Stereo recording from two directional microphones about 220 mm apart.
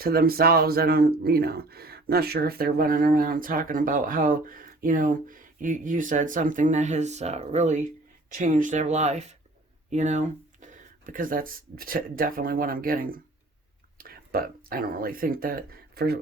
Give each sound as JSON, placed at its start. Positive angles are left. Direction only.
{"t": 0.0, "sound": "speech", "side_deg": -45}